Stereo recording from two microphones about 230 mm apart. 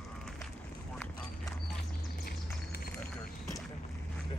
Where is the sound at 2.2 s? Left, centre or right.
Left.